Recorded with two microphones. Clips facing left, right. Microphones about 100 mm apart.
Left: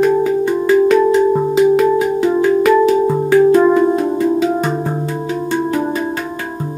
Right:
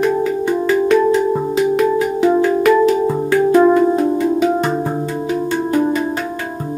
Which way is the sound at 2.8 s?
15° left (ahead or behind).